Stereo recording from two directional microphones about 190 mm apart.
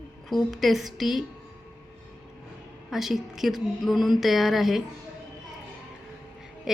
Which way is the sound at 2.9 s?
Centre (ahead or behind).